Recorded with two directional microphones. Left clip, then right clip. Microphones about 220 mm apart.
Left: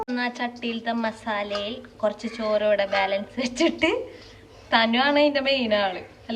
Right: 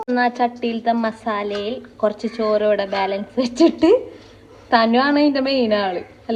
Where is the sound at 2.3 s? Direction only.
40° left (ahead or behind).